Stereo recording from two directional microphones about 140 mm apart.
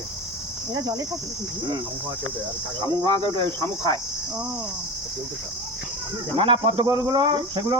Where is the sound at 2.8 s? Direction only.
35° right (ahead or behind).